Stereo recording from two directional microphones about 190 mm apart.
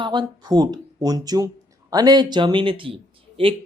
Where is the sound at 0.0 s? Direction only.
20° right (ahead or behind).